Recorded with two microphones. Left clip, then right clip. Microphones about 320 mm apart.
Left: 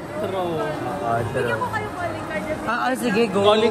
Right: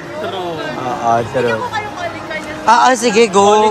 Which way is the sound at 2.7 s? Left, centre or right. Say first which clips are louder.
Right 14 dB; centre.